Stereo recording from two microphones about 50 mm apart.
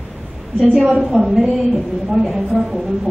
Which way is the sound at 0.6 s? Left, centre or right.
Centre.